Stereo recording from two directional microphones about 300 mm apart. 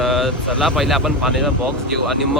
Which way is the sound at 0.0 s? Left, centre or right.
Centre.